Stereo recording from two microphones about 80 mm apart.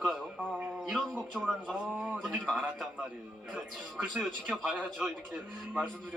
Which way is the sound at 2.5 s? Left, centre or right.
Centre.